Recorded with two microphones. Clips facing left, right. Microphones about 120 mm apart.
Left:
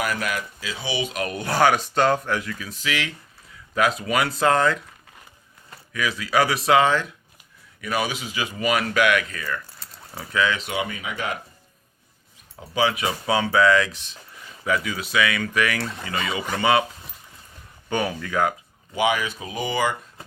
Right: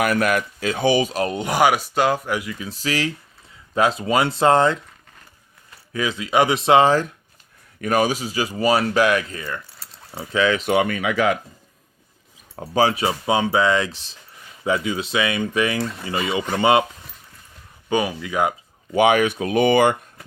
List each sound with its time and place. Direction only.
0.0 s speech: 55° right (ahead or behind); by 2.6 s 10° right (ahead or behind)
2.6 s speech: 30° right (ahead or behind)
5.9 s speech: 25° right (ahead or behind)
10.7 s speech: 60° right (ahead or behind); by 11.3 s 85° right
12.5 s speech: 40° right (ahead or behind); by 15.8 s 25° right (ahead or behind)
15.8 s speech: centre (ahead or behind)
16.5 s speech: 25° right (ahead or behind)
17.8 s speech: 15° right (ahead or behind)
18.9 s speech: 60° right (ahead or behind)